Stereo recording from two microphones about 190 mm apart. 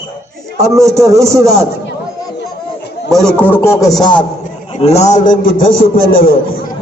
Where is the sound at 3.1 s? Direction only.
5° left (ahead or behind).